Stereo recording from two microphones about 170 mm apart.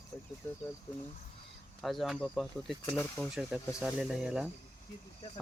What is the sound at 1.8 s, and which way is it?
Speech, centre (ahead or behind).